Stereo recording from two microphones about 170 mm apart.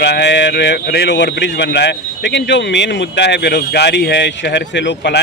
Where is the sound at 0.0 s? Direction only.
85° left.